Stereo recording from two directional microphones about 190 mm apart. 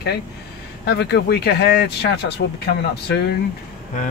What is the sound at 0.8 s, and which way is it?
Speech, 60° left (ahead or behind).